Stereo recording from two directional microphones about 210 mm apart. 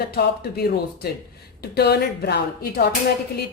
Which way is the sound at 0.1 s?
50° left (ahead or behind).